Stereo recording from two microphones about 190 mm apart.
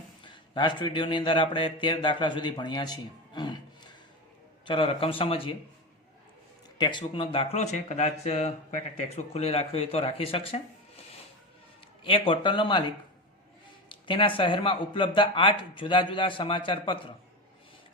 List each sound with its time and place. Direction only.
0.3 s speech: 25° left (ahead or behind)
4.6 s speech: 30° left (ahead or behind)
6.7 s speech: 25° left (ahead or behind)
12.0 s speech: 30° left (ahead or behind)
13.9 s speech: 25° left (ahead or behind)